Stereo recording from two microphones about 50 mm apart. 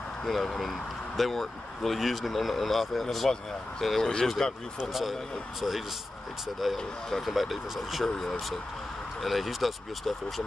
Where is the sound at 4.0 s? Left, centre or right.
Centre.